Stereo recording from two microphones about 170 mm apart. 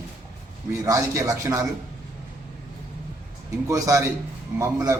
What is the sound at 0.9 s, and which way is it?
Speech, 20° right (ahead or behind).